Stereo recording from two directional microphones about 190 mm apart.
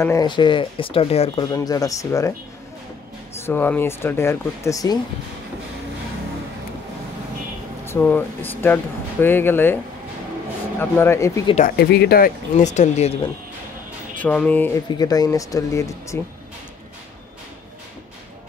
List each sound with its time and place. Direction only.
0.0 s speech: 20° left (ahead or behind)
3.4 s speech: 10° left (ahead or behind)
7.8 s speech: 10° left (ahead or behind)
10.8 s speech: 15° left (ahead or behind)
11.6 s speech: 55° left (ahead or behind); by 13.1 s 35° left (ahead or behind)
14.2 s speech: 10° left (ahead or behind)
15.0 s speech: 20° left (ahead or behind)